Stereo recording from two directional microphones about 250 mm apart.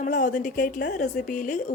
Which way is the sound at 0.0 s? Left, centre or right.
Left.